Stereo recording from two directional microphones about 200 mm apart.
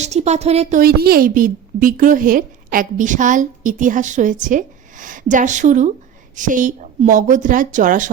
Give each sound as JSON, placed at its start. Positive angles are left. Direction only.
{"t": 0.0, "sound": "speech", "side_deg": -35}
{"t": 0.8, "sound": "a woman's voice", "side_deg": -50}